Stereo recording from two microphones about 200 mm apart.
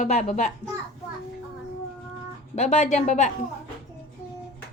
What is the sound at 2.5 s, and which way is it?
Speech, 35° left (ahead or behind).